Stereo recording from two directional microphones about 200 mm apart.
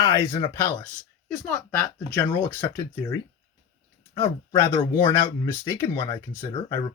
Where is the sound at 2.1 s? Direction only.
10° left (ahead or behind).